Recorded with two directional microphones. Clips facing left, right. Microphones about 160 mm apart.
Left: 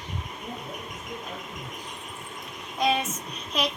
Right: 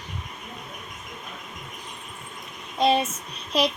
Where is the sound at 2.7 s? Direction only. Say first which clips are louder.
Right 4 dB; 30° right (ahead or behind).